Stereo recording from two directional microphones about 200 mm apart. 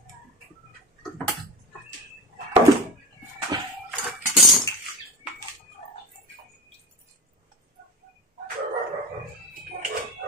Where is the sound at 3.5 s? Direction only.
20° right (ahead or behind).